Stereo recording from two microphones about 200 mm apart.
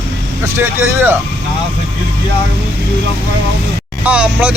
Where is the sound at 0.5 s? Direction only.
10° right (ahead or behind).